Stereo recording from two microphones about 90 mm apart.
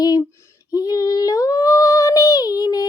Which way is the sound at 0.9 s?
45° left (ahead or behind).